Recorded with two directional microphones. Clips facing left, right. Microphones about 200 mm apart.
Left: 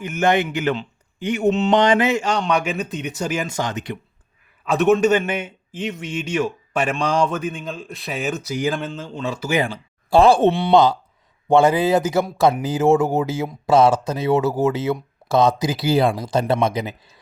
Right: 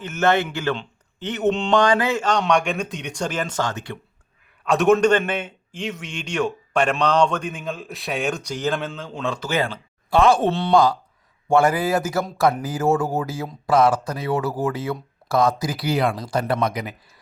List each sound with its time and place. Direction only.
0.0 s a man's voice: 15° left (ahead or behind)
1.7 s a man's voice: 20° left (ahead or behind)
4.6 s a man's voice: centre (ahead or behind)
10.1 s speech: 30° left (ahead or behind)
10.5 s speech: 15° left (ahead or behind)